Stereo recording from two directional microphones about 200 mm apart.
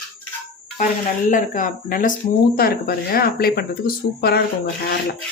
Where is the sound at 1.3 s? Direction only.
40° left (ahead or behind).